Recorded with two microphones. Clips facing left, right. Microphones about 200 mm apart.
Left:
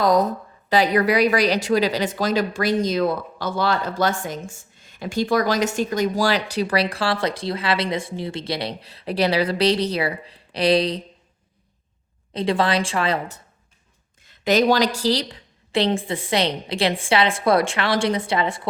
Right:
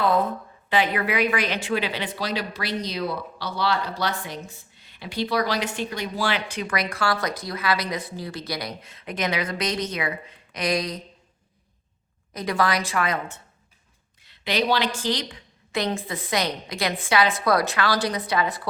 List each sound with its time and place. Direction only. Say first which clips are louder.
0.0 s a woman's voice: left 4 dB; 40° left (ahead or behind)
12.3 s a woman's voice: left 4 dB; 30° left (ahead or behind)